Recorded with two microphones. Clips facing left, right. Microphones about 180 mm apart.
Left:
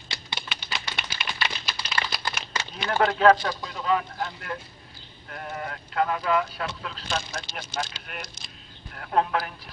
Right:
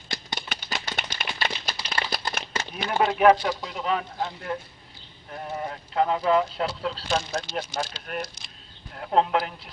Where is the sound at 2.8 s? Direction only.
15° right (ahead or behind); by 8.2 s 35° right (ahead or behind).